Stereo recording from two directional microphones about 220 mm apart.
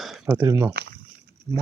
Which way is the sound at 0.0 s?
Centre (ahead or behind).